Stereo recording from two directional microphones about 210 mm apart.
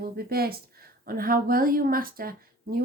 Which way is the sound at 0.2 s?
45° right (ahead or behind).